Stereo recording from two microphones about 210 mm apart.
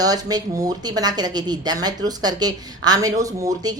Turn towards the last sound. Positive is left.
turn(degrees=-15)  # may be behind; listen again after turning